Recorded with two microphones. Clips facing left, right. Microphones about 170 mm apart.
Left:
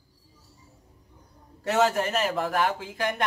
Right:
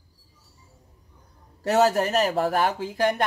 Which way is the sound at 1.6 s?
35° right (ahead or behind).